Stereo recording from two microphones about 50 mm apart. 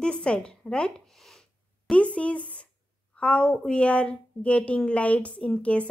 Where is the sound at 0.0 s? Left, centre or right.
Centre.